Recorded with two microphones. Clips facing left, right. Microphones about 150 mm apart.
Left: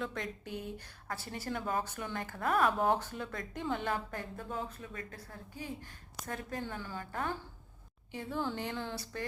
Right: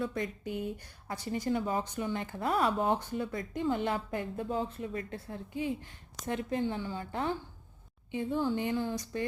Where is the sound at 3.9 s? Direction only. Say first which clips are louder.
Right 3 dB; 15° right (ahead or behind).